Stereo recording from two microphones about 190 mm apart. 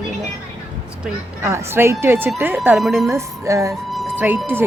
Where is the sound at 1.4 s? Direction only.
15° right (ahead or behind).